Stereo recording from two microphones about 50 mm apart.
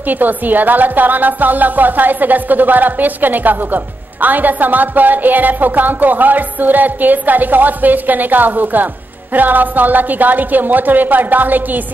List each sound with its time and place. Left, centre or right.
0.0 s speech: right